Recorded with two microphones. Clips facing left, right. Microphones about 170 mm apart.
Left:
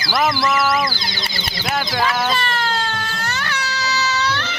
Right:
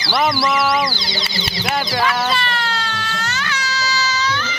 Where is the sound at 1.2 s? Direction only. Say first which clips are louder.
Right 2 dB; 55° left (ahead or behind).